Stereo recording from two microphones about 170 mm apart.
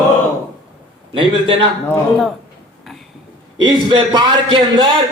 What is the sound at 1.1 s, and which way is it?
Speech, 30° right (ahead or behind).